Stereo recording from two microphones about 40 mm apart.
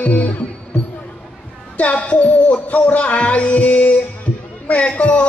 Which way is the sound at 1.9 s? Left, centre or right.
Left.